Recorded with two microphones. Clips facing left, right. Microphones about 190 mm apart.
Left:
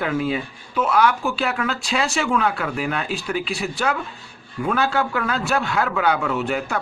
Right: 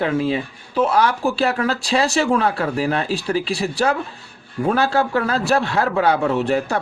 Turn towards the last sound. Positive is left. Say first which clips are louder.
# right 5 dB
turn(degrees=-35)  # may be behind; listen again after turning